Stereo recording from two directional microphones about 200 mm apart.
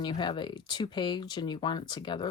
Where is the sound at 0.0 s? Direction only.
25° left (ahead or behind).